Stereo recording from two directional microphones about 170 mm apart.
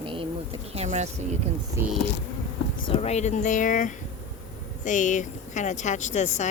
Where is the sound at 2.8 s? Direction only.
35° left (ahead or behind).